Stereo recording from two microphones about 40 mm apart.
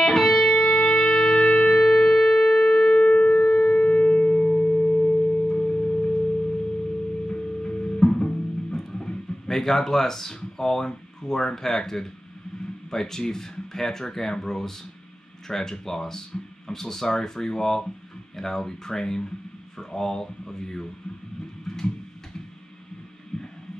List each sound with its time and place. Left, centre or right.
0.0 s music: centre
0.5 s music: centre
1.7 s shofar: centre
3.7 s music: left; by 6.1 s centre
7.2 s music: left
9.6 s speech: centre
19.8 s a sound: centre